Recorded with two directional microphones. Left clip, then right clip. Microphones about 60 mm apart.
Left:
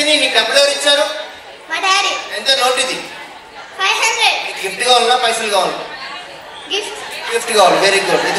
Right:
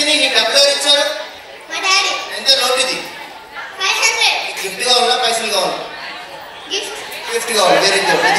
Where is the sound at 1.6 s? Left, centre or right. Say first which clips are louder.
Left 1 dB; left.